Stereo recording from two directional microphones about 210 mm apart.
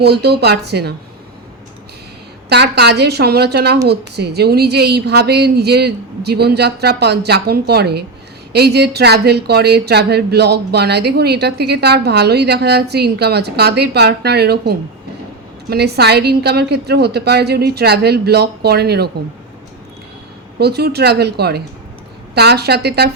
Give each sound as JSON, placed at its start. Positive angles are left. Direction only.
{"t": 0.0, "sound": "speech", "side_deg": -50}
{"t": 2.5, "sound": "speech", "side_deg": -50}
{"t": 20.6, "sound": "speech", "side_deg": -50}